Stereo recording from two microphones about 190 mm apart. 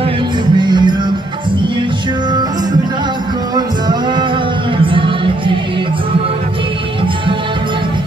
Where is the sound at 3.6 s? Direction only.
20° right (ahead or behind).